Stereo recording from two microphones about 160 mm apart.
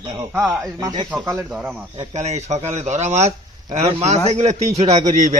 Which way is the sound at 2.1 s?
45° right (ahead or behind).